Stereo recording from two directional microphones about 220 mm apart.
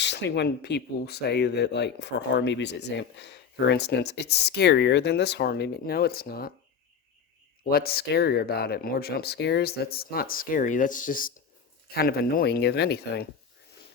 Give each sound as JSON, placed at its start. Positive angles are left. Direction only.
{"t": 0.0, "sound": "speech", "side_deg": 50}
{"t": 7.6, "sound": "speech", "side_deg": 45}